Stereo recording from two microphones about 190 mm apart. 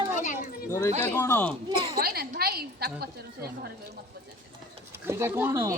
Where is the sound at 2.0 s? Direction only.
55° right (ahead or behind).